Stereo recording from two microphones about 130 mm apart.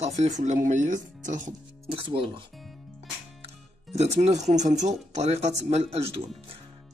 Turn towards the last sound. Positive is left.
turn(degrees=-50)  # may be behind; listen again after turning